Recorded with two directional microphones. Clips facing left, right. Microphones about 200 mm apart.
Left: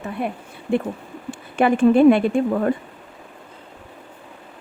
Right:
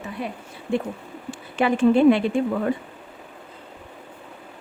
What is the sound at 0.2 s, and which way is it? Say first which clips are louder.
Speech: left 5 dB; 60° left (ahead or behind).